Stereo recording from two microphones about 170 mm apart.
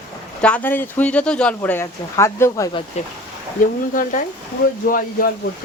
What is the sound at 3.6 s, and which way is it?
Speech, 50° left (ahead or behind).